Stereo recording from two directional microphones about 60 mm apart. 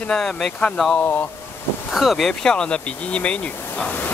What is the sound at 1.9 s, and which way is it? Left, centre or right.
Speech, centre.